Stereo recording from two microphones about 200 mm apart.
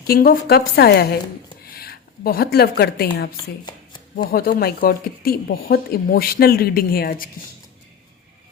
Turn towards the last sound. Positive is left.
turn(degrees=45)  # may be behind; listen again after turning